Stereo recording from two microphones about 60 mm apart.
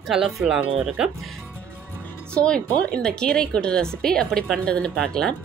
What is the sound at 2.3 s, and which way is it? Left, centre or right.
A woman's voice, centre.